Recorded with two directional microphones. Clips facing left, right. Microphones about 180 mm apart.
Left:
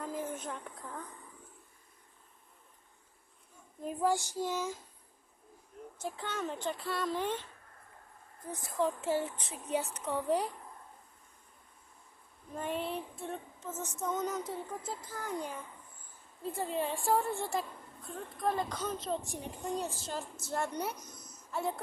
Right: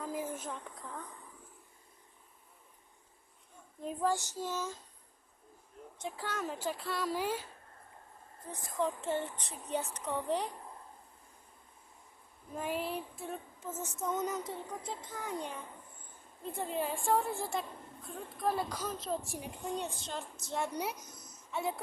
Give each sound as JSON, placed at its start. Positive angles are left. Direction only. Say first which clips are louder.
{"t": 0.0, "sound": "a woman's voice", "louder": "even", "side_deg": -5}
{"t": 3.8, "sound": "child singing", "louder": "left 2 dB", "side_deg": 10}
{"t": 6.0, "sound": "a woman's voice", "louder": "left 1 dB", "side_deg": 0}
{"t": 8.4, "sound": "child singing", "louder": "left 4 dB", "side_deg": 10}
{"t": 8.8, "sound": "a woman's voice", "louder": "left 2 dB", "side_deg": 5}
{"t": 12.5, "sound": "a woman's voice", "louder": "even", "side_deg": -5}